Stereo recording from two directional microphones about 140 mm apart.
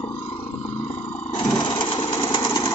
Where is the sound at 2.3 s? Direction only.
30° left (ahead or behind).